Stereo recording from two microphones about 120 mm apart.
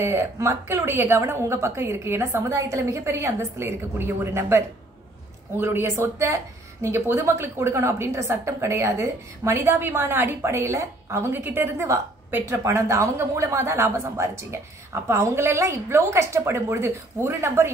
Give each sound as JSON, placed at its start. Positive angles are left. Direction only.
{"t": 0.0, "sound": "a woman's voice", "side_deg": -20}